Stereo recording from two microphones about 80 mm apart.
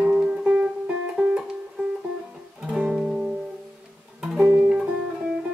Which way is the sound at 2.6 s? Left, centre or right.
Centre.